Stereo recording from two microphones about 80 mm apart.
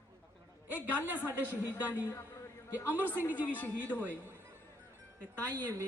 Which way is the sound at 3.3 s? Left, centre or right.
Left.